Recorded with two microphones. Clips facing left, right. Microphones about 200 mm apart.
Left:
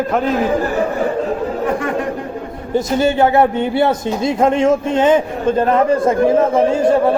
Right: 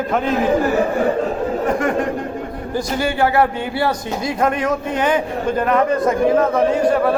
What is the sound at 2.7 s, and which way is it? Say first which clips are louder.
Speech: left 6 dB; 25° left (ahead or behind).